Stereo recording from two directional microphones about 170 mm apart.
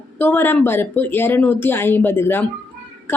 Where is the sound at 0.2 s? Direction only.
10° left (ahead or behind).